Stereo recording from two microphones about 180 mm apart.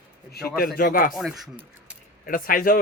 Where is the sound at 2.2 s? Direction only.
50° left (ahead or behind).